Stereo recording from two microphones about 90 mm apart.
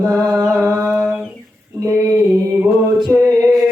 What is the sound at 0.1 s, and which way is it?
Music, 45° right (ahead or behind).